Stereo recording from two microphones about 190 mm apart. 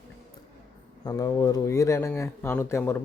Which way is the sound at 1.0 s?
20° left (ahead or behind).